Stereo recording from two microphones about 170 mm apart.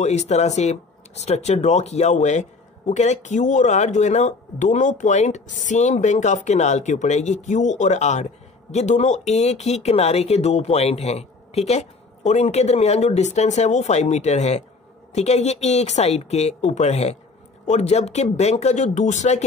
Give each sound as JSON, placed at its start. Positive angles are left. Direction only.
{"t": 0.0, "sound": "speech", "side_deg": 40}